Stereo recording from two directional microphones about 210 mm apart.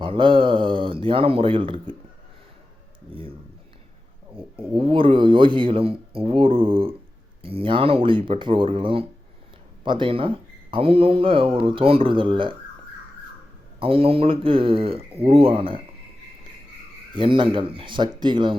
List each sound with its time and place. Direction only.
0.0 s speech: 25° right (ahead or behind)
3.1 s speech: 25° right (ahead or behind)
4.4 s speech: 25° right (ahead or behind)
13.7 s speech: 25° right (ahead or behind)
17.2 s speech: 25° right (ahead or behind)